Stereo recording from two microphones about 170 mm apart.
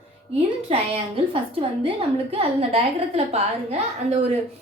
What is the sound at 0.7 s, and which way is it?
A woman's voice, 35° right (ahead or behind).